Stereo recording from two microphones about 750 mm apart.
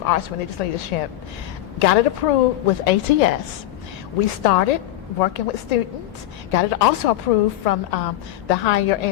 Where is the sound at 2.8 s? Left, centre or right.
Left.